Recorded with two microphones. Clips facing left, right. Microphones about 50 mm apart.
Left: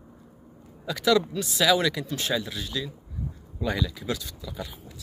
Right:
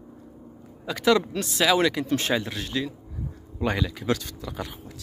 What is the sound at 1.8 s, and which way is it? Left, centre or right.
Speech, right.